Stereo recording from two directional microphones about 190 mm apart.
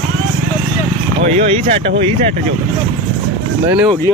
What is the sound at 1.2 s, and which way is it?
Speech, 35° right (ahead or behind).